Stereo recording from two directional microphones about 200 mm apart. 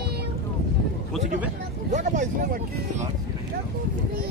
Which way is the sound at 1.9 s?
40° right (ahead or behind).